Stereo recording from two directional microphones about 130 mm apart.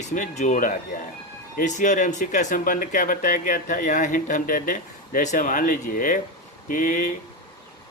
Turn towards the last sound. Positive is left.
turn(degrees=80)